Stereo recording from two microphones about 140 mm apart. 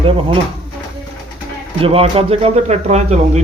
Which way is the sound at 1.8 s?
40° right (ahead or behind).